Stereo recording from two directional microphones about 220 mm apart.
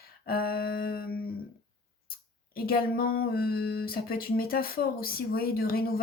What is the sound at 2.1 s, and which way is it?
A woman's voice, 45° left (ahead or behind).